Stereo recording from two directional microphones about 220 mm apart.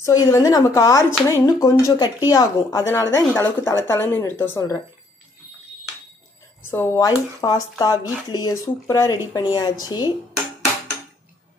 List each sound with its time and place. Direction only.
0.0 s speech: 15° left (ahead or behind)
6.7 s speech: 10° left (ahead or behind)